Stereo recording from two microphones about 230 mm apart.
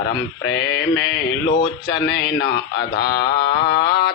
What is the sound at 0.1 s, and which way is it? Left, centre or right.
Speech, left.